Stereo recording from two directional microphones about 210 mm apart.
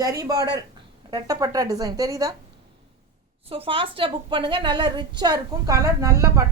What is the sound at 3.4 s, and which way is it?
A woman's voice, 25° right (ahead or behind).